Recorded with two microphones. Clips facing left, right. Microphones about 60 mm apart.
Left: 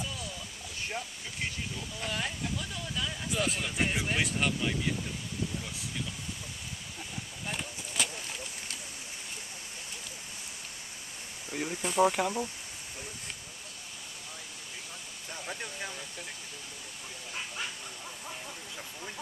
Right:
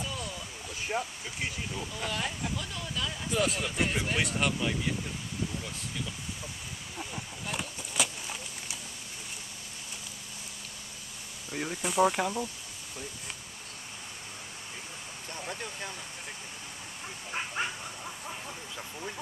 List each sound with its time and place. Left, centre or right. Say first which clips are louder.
0.9 s speech: right 7 dB; right
2.0 s speech: even; centre
7.5 s a sound: right 3 dB; centre
11.5 s speech: even; centre
15.3 s speech: right 1 dB; centre
17.6 s speech: right 6 dB; right
18.8 s speech: right 5 dB; centre